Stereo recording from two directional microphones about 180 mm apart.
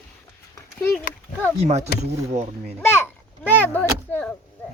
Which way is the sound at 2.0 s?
35° right (ahead or behind).